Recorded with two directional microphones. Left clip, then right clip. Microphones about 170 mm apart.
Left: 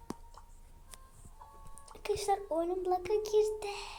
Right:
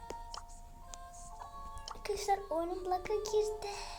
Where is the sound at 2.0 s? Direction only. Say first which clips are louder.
Left 2 dB; 5° left (ahead or behind).